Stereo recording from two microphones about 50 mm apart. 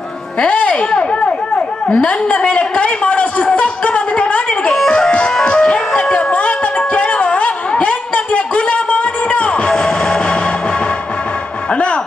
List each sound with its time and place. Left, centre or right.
0.4 s a sound: left
4.9 s music: left
11.7 s music: left